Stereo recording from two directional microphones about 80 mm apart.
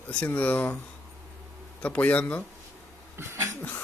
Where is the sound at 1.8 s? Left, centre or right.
Centre.